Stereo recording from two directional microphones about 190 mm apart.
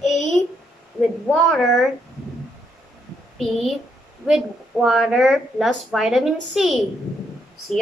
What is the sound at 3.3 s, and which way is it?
A woman's voice, centre (ahead or behind).